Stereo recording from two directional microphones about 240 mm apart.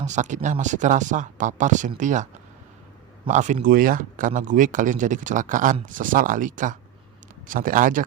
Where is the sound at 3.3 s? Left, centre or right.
Right.